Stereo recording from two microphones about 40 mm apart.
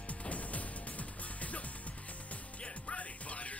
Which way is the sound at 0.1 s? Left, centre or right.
Left.